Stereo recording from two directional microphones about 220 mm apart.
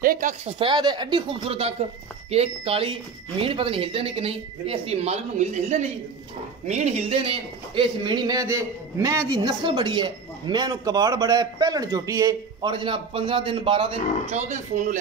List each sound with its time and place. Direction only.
0.0 s speech: 40° right (ahead or behind)
0.6 s a man's voice: 20° right (ahead or behind)